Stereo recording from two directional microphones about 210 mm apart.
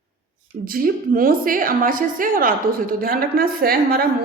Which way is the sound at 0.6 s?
45° right (ahead or behind).